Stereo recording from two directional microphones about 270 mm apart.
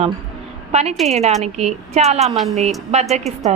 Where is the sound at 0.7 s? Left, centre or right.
Right.